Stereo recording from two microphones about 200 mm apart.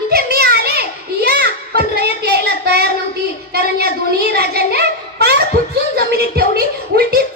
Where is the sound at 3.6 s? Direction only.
50° right (ahead or behind).